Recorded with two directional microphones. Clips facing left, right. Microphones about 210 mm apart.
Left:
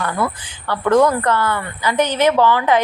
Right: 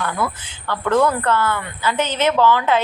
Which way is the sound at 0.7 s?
15° left (ahead or behind).